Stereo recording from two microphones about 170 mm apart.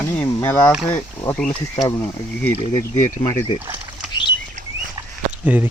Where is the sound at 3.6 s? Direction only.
10° right (ahead or behind).